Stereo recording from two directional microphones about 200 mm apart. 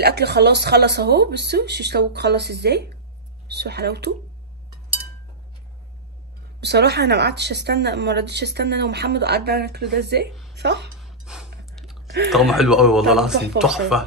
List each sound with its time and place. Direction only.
0.0 s speech: 55° right (ahead or behind)
6.6 s speech: 55° right (ahead or behind)
11.0 s a sound: centre (ahead or behind)
11.7 s chewing: centre (ahead or behind)
12.3 s speech: centre (ahead or behind)